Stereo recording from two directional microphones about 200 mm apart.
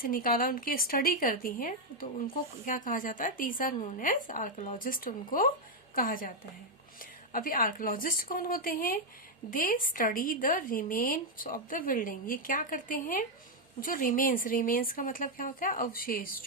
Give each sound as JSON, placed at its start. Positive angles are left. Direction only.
{"t": 0.0, "sound": "a woman's voice", "side_deg": 45}